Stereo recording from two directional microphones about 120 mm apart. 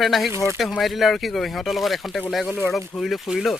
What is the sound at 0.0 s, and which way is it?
Speech, centre (ahead or behind).